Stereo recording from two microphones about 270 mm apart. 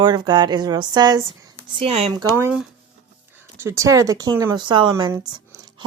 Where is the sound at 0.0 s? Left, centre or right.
Centre.